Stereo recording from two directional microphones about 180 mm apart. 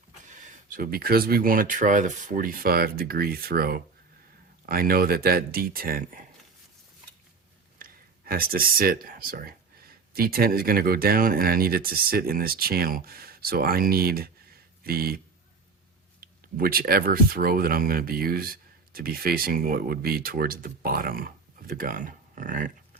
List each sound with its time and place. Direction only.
0.3 s speech: 45° right (ahead or behind)
7.8 s speech: 50° right (ahead or behind)
16.2 s speech: 55° right (ahead or behind)